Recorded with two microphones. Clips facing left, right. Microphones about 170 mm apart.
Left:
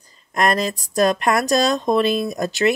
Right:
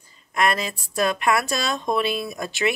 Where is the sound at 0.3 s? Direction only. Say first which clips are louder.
Left 4 dB; 40° left (ahead or behind).